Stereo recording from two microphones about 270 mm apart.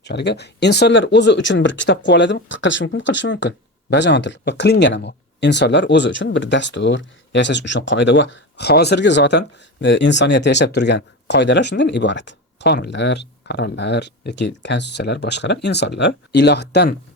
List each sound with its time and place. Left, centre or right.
0.0 s speech: left